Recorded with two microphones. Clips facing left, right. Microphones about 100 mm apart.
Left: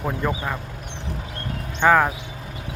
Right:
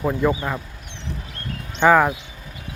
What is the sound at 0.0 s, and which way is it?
Speech, 5° right (ahead or behind).